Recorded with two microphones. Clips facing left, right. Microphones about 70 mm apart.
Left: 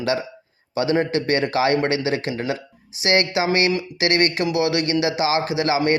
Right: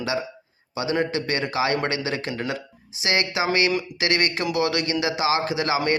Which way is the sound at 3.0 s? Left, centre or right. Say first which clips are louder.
Left 4 dB; left.